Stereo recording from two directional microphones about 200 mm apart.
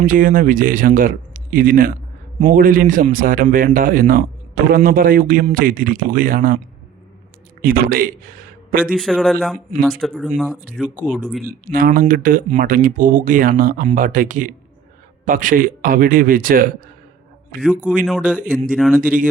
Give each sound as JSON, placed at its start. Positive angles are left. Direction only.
{"t": 0.0, "sound": "a man's voice", "side_deg": -45}
{"t": 7.6, "sound": "a man's voice", "side_deg": -45}
{"t": 9.0, "sound": "speech", "side_deg": 0}
{"t": 11.7, "sound": "a man's voice", "side_deg": -45}
{"t": 17.6, "sound": "speech", "side_deg": -5}
{"t": 18.3, "sound": "speech", "side_deg": -40}
{"t": 18.7, "sound": "speech", "side_deg": 0}